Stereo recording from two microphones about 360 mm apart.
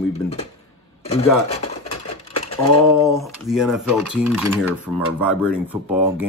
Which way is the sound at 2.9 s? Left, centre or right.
Centre.